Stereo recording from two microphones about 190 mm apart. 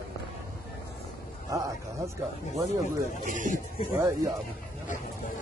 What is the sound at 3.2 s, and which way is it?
Speech, 40° right (ahead or behind).